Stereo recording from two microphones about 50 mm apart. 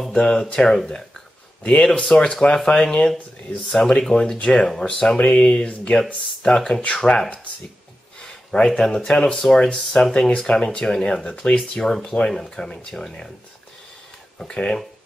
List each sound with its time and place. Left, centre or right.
0.1 s speech: centre
1.6 s speech: left
1.9 s speech: centre
14.4 s speech: centre